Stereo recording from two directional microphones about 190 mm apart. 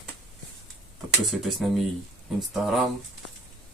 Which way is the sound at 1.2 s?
Centre (ahead or behind).